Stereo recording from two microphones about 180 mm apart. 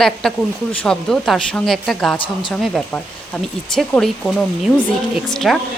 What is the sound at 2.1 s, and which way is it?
Speech, 30° left (ahead or behind).